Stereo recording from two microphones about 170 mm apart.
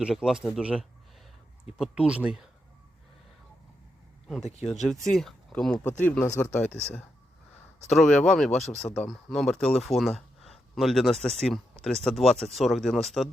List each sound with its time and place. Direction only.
0.0 s speech: 5° right (ahead or behind)
4.4 s speech: 40° left (ahead or behind)
4.7 s speech: centre (ahead or behind)
6.2 s speech: 15° left (ahead or behind); by 13.2 s centre (ahead or behind)